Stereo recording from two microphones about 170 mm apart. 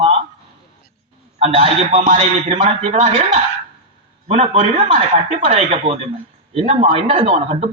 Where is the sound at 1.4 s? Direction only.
35° right (ahead or behind).